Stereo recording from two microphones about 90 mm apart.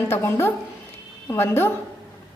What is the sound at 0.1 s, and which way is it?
A woman's voice, 30° left (ahead or behind).